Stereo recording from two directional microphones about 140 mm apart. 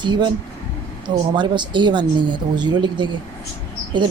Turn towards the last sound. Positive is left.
turn(degrees=-35)  # may be behind; listen again after turning